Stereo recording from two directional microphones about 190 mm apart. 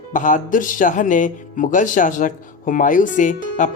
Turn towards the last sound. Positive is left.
turn(degrees=40)  # may be behind; listen again after turning